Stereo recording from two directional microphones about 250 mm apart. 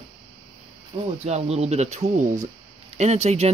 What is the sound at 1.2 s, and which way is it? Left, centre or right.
Speech, right.